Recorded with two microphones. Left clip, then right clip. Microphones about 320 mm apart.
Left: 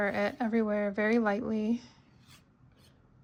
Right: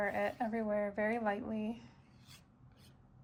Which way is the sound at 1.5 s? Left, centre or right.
Centre.